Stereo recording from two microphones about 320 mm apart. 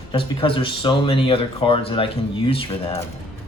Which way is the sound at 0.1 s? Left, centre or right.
Centre.